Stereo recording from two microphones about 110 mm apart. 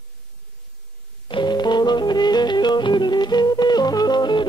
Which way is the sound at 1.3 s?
45° left (ahead or behind).